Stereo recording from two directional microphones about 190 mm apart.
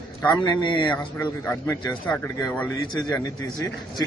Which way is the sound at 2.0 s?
10° left (ahead or behind).